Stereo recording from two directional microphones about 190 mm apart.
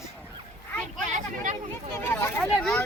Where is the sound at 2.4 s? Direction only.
Centre (ahead or behind).